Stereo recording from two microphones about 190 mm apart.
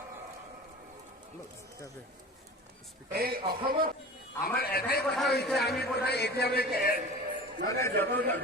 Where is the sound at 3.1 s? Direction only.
55° right (ahead or behind).